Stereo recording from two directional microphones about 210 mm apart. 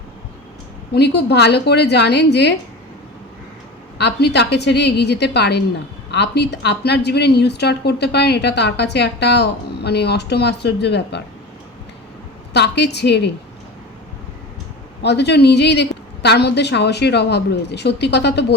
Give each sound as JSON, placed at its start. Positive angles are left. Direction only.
{"t": 0.9, "sound": "a woman's voice", "side_deg": 50}
{"t": 3.9, "sound": "a woman's voice", "side_deg": 55}
{"t": 12.5, "sound": "a woman's voice", "side_deg": 55}
{"t": 15.0, "sound": "a woman's voice", "side_deg": 55}